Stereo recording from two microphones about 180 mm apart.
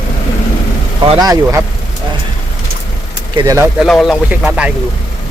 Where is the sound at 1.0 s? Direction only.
30° right (ahead or behind).